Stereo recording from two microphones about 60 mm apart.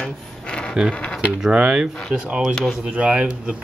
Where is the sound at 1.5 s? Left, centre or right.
Centre.